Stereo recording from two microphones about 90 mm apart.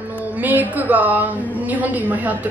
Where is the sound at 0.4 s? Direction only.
20° right (ahead or behind).